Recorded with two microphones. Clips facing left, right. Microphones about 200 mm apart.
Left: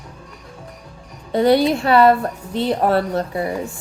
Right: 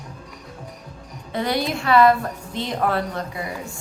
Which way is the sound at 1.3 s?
30° left (ahead or behind).